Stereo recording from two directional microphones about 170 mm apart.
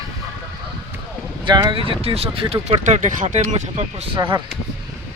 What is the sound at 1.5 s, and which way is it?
Speech, 30° right (ahead or behind).